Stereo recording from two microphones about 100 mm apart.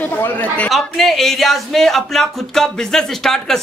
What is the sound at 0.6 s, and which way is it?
A woman's voice, centre (ahead or behind).